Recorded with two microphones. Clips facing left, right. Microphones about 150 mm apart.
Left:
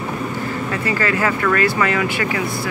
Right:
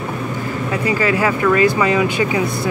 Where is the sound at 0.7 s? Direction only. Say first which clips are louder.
Right 4 dB; 15° right (ahead or behind).